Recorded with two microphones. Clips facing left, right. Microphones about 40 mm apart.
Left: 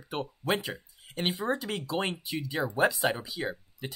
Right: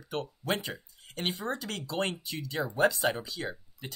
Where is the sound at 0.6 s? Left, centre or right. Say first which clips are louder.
Left 1 dB; centre.